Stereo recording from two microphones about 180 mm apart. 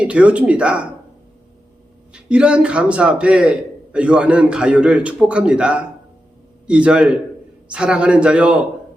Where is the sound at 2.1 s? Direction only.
5° right (ahead or behind).